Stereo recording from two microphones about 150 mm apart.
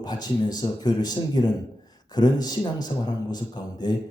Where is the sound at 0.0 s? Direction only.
25° left (ahead or behind).